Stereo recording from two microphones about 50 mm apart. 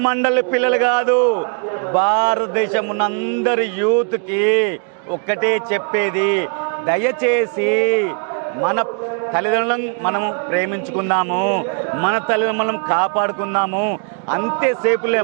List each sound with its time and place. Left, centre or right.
0.0 s a man's voice: right